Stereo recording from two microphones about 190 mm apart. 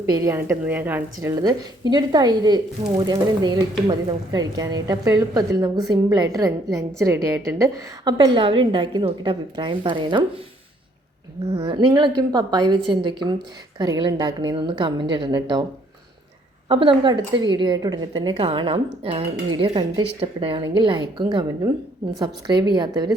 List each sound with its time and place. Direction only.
0.0 s a woman's voice: 15° right (ahead or behind)
11.5 s a woman's voice: 30° right (ahead or behind)
16.6 s a woman's voice: 25° right (ahead or behind)